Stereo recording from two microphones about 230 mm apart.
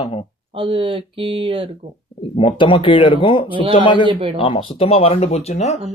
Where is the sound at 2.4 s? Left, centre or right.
Left.